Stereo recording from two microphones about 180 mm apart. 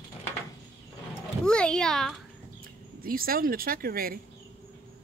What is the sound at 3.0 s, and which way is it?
Speech, 55° right (ahead or behind).